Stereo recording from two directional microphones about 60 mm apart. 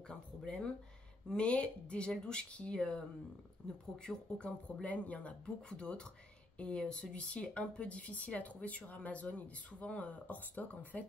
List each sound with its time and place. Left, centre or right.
0.1 s speech: centre